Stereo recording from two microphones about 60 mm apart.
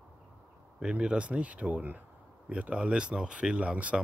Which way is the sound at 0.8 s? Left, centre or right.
Centre.